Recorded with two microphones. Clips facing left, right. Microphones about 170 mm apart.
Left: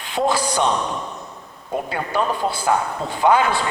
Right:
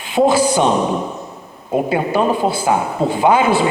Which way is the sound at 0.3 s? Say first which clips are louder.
Right 5 dB; 10° right (ahead or behind).